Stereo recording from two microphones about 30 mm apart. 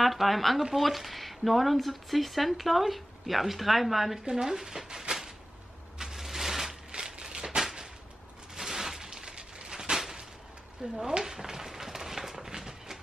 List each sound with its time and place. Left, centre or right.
0.0 s speech: centre
4.2 s speech: centre
6.1 s mechanisms: centre
6.9 s a sound: right